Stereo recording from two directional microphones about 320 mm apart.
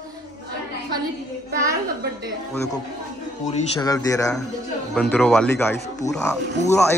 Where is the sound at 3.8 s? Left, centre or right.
Centre.